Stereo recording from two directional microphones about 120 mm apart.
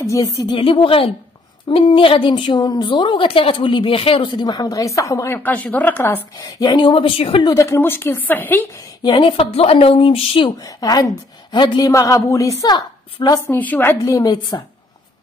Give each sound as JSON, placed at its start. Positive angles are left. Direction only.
{"t": 0.0, "sound": "a woman's voice", "side_deg": 25}
{"t": 0.6, "sound": "a woman's voice", "side_deg": 50}
{"t": 6.3, "sound": "speech", "side_deg": 35}
{"t": 7.4, "sound": "a woman's voice", "side_deg": 25}
{"t": 9.0, "sound": "speech", "side_deg": 40}
{"t": 10.6, "sound": "a woman's voice", "side_deg": 30}
{"t": 11.9, "sound": "a woman's voice", "side_deg": 25}
{"t": 13.5, "sound": "a woman's voice", "side_deg": 15}